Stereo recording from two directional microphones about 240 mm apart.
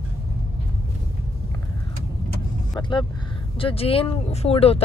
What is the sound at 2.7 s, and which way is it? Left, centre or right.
Speech, centre.